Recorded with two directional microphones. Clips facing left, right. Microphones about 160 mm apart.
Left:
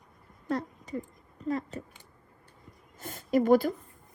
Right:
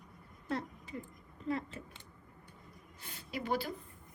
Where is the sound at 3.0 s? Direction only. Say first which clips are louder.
Left 16 dB; 45° left (ahead or behind).